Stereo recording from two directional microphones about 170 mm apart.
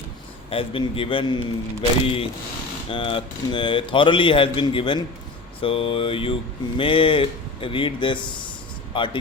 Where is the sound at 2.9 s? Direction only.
30° left (ahead or behind).